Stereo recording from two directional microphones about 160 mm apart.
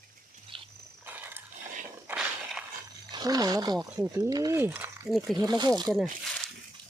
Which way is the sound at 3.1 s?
25° right (ahead or behind).